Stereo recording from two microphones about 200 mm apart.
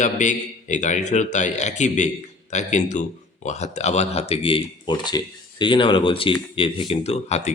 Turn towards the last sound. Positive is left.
turn(degrees=35)  # may be behind; listen again after turning